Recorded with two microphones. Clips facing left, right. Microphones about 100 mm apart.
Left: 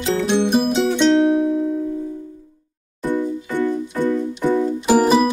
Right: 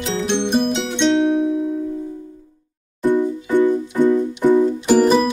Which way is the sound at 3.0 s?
20° right (ahead or behind).